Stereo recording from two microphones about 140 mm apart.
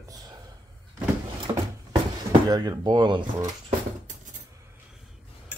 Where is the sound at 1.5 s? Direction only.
30° right (ahead or behind).